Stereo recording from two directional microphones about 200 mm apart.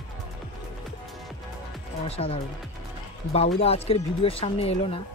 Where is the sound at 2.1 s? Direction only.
30° left (ahead or behind).